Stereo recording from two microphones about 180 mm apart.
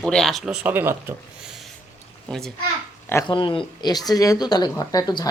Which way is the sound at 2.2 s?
Centre (ahead or behind).